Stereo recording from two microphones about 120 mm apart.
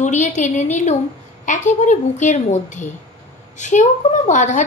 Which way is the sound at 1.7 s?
90° left.